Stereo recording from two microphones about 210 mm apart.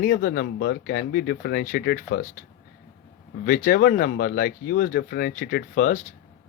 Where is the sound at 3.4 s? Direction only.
45° left (ahead or behind).